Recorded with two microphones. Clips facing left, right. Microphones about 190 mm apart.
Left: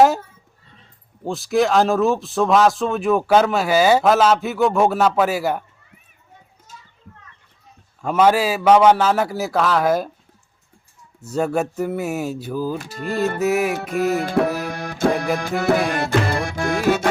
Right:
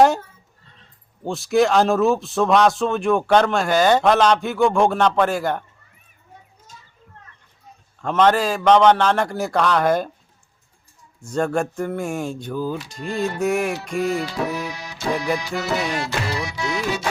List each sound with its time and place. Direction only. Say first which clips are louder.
1.2 s speech: right 1 dB; centre (ahead or behind)
8.0 s speech: left 1 dB; 10° left (ahead or behind)
11.2 s speech: left 1 dB; 5° left (ahead or behind)
14.1 s music: left 4 dB; 55° left (ahead or behind)